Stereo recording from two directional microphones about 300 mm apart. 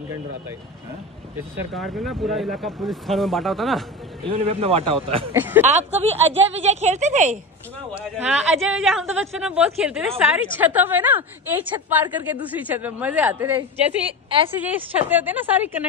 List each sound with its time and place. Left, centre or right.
1.7 s speech: centre
4.2 s speech: centre
5.3 s speech: centre
5.6 s speech: right
7.9 s speech: centre